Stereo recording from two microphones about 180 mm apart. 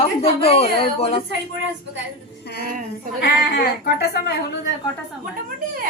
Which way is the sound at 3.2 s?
60° left (ahead or behind).